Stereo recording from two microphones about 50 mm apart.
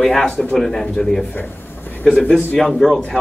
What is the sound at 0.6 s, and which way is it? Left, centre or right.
A man's voice, centre.